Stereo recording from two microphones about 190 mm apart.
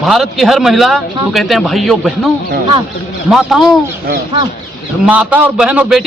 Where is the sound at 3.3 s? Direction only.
Centre (ahead or behind).